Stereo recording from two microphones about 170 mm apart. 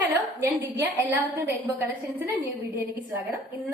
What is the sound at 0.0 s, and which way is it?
A woman's voice, 10° right (ahead or behind).